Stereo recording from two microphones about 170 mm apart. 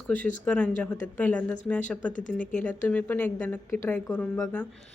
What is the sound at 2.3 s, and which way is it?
A woman's voice, 10° left (ahead or behind).